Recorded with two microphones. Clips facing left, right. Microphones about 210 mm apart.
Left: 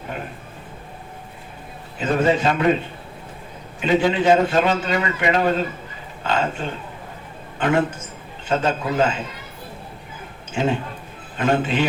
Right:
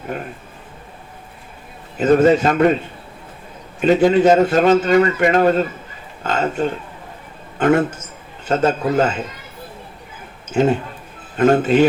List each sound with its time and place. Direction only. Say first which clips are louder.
2.0 s a man's voice: right 7 dB; 40° right (ahead or behind)
3.8 s a man's voice: right 6 dB; 45° right (ahead or behind)
10.5 s a man's voice: right 6 dB; 45° right (ahead or behind)